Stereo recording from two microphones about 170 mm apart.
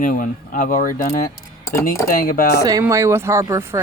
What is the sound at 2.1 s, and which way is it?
Speech, 55° left (ahead or behind).